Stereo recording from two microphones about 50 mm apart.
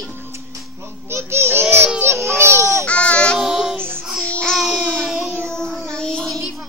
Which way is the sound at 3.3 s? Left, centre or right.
Centre.